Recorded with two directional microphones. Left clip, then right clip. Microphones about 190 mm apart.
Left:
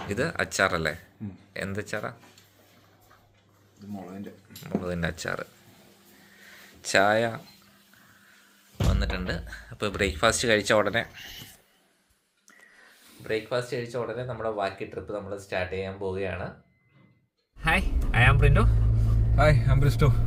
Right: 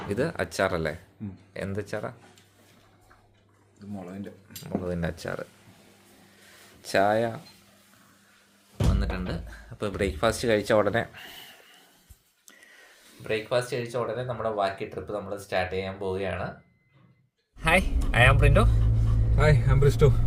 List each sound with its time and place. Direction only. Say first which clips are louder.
0.1 s speech: even; 20° right (ahead or behind)
4.6 s speech: left 1 dB; 15° right (ahead or behind)
6.8 s speech: left 1 dB; 10° right (ahead or behind)
8.9 s speech: left 5 dB; 10° right (ahead or behind)
10.9 s speech: even; 35° right (ahead or behind)
11.2 s speech: left 1 dB; 50° right (ahead or behind)
13.2 s speech: right 2 dB; 25° right (ahead or behind)
17.6 s speech: right 2 dB; 20° right (ahead or behind)
19.5 s a man's voice: right 1 dB; 15° left (ahead or behind)